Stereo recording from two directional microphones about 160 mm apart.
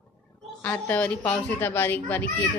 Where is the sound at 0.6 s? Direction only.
10° left (ahead or behind).